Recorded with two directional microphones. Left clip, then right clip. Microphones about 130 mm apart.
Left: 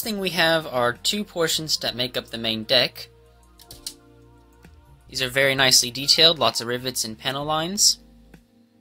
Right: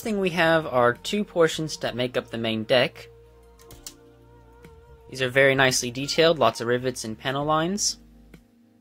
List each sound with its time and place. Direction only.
0.0 s speech: 25° right (ahead or behind)
5.1 s speech: 25° right (ahead or behind)